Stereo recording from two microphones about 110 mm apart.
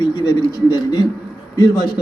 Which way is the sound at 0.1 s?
40° left (ahead or behind).